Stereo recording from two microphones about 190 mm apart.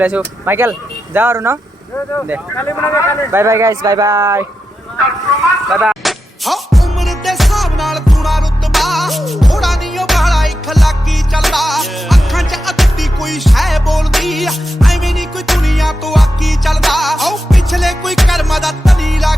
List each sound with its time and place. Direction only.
0.0 s speech: 10° right (ahead or behind)
2.6 s speech: 15° left (ahead or behind)
3.3 s speech: 15° right (ahead or behind)
5.4 s music: centre (ahead or behind)